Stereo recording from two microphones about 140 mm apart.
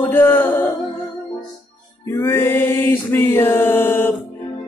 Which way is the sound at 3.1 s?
15° left (ahead or behind).